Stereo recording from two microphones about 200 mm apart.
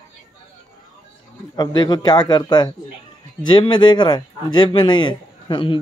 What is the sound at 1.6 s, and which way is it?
Speech, 20° left (ahead or behind).